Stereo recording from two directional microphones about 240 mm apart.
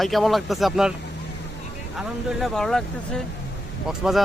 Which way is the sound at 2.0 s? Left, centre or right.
Centre.